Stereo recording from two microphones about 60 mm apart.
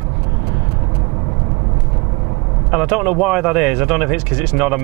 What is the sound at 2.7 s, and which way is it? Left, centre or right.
Speech, centre.